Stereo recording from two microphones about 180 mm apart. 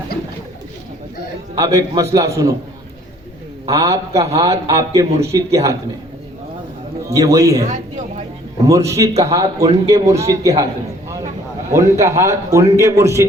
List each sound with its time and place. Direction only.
1.5 s a man's voice: 20° right (ahead or behind)
3.7 s a man's voice: 20° right (ahead or behind)
7.1 s a man's voice: 15° right (ahead or behind)
8.6 s a man's voice: 15° right (ahead or behind)
11.7 s a man's voice: 15° right (ahead or behind)